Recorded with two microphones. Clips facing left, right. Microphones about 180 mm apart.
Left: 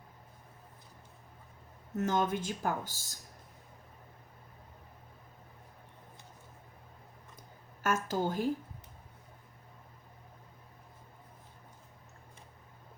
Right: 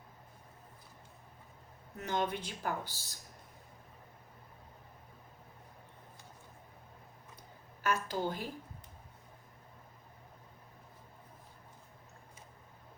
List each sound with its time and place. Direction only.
2.0 s speech: 45° left (ahead or behind)
7.8 s a woman's voice: 45° left (ahead or behind)